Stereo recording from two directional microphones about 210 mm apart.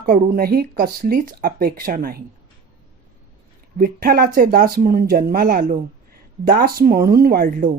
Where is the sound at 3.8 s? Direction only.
45° right (ahead or behind).